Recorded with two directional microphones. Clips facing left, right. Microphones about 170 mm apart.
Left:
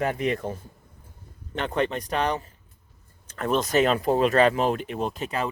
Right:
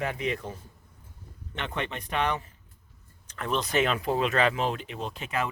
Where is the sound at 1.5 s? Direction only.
40° left (ahead or behind).